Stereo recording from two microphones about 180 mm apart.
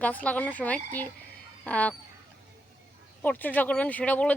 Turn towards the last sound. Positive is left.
turn(degrees=10)  # may be behind; listen again after turning